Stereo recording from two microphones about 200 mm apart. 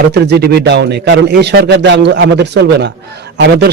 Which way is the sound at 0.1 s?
55° right (ahead or behind).